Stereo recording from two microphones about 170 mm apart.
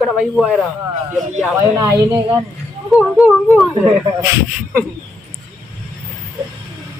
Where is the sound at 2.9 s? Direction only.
Centre (ahead or behind).